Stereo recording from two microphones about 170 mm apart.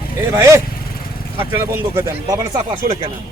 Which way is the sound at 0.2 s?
15° right (ahead or behind).